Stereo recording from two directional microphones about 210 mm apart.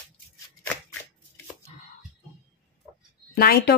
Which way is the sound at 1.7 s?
30° left (ahead or behind).